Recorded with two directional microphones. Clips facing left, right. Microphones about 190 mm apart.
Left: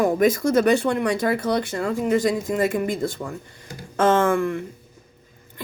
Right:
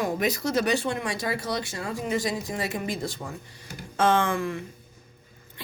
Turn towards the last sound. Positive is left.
turn(degrees=55)  # may be behind; listen again after turning